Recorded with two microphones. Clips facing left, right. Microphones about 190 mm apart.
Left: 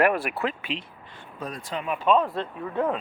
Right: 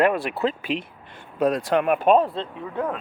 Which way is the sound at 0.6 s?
45° right (ahead or behind).